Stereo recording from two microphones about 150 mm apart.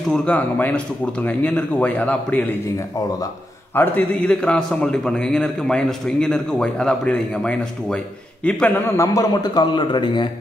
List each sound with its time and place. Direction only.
0.1 s speech: 10° left (ahead or behind)
3.7 s a man's voice: 10° left (ahead or behind)
8.9 s a man's voice: 20° left (ahead or behind)